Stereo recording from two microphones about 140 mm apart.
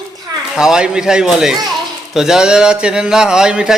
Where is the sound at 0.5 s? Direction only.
5° right (ahead or behind).